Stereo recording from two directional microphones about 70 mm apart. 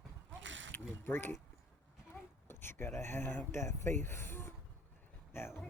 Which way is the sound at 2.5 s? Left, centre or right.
Left.